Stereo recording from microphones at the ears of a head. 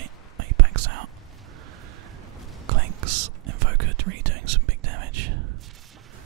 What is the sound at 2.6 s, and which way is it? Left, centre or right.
Whispering, right.